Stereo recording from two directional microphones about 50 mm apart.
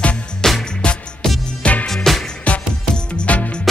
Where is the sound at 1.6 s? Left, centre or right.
Left.